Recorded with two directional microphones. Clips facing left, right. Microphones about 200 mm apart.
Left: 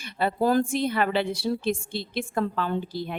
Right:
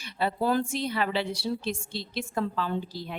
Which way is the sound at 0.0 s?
55° left (ahead or behind).